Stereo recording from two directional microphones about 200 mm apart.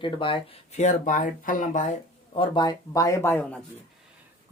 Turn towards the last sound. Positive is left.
turn(degrees=10)  # may be behind; listen again after turning